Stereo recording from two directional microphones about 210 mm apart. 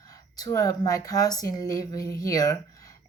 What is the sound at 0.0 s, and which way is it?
Speech, 15° left (ahead or behind).